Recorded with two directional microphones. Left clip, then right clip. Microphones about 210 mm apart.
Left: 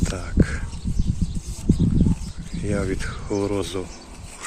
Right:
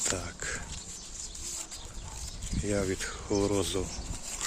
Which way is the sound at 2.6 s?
5° right (ahead or behind).